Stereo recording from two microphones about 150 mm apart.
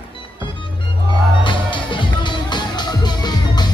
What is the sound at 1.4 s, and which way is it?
Music, 35° left (ahead or behind).